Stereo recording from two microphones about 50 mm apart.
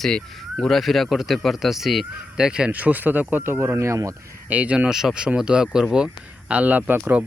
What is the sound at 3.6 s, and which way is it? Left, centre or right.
Speech, right.